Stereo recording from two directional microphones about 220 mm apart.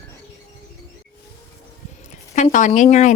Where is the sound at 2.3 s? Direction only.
35° left (ahead or behind).